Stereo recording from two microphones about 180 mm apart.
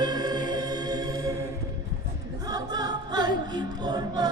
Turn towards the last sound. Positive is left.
turn(degrees=-20)  # may be behind; listen again after turning